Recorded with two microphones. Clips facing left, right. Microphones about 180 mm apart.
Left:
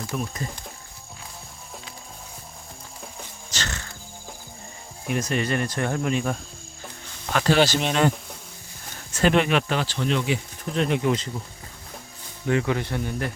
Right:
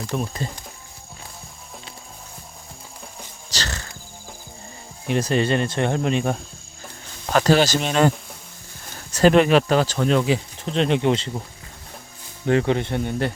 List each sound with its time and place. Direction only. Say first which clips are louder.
0.1 s speech: right 4 dB; 30° right (ahead or behind)
3.5 s music: right 2 dB; 35° right (ahead or behind)
5.0 s speech: right 5 dB; 30° right (ahead or behind)
7.3 s speech: right 3 dB; 40° right (ahead or behind)
9.1 s speech: right 6 dB; 40° right (ahead or behind)
12.5 s speech: right 4 dB; 30° right (ahead or behind)